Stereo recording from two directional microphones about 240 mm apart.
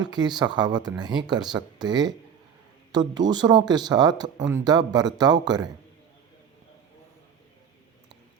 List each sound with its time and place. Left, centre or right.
0.0 s speech: centre